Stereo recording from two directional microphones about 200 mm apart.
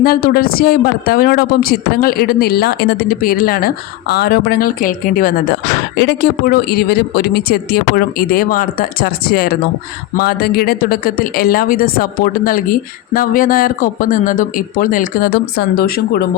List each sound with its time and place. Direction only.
0.0 s speech: 50° left (ahead or behind)